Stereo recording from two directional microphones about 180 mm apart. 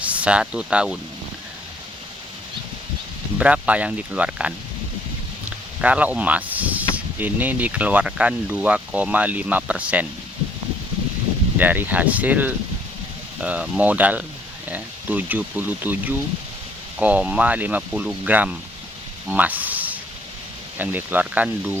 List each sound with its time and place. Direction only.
0.0 s speech: 5° right (ahead or behind)
3.3 s speech: 5° right (ahead or behind)
5.8 s speech: 10° right (ahead or behind)
11.5 s speech: 10° right (ahead or behind)
19.3 s a sound: 10° right (ahead or behind)
20.7 s speech: 10° right (ahead or behind)